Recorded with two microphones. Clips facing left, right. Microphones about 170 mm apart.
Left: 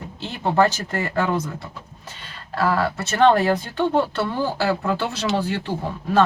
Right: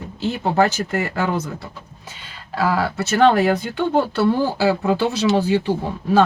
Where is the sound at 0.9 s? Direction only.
5° right (ahead or behind).